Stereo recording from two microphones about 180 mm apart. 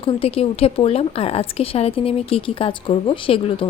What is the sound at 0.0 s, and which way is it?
A woman's voice, 30° left (ahead or behind).